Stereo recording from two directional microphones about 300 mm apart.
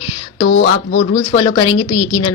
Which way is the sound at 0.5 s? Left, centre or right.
Left.